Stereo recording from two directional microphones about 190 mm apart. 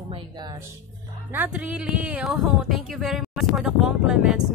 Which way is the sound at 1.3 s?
10° right (ahead or behind).